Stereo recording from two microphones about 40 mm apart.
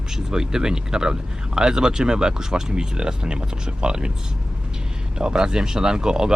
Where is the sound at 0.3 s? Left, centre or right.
Centre.